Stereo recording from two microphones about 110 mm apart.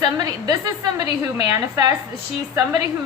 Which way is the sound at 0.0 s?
35° right (ahead or behind).